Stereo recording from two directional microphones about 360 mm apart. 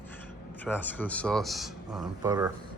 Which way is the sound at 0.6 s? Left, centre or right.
Centre.